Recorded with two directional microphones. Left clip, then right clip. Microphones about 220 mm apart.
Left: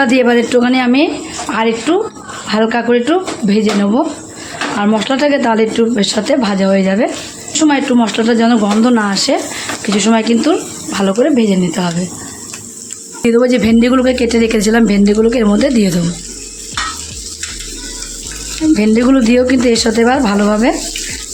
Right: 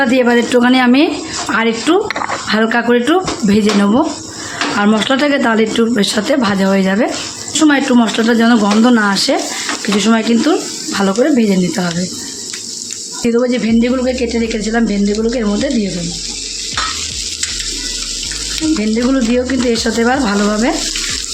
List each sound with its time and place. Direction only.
0.0 s speech: 15° left (ahead or behind)
13.2 s speech: 35° left (ahead or behind)
18.8 s speech: 25° left (ahead or behind)